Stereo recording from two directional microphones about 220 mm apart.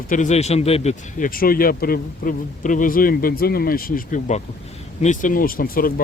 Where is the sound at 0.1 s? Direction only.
35° left (ahead or behind).